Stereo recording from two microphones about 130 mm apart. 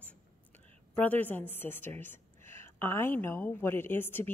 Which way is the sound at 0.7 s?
10° left (ahead or behind).